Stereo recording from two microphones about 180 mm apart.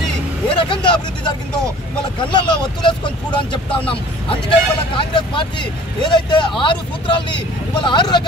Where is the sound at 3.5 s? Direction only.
30° left (ahead or behind).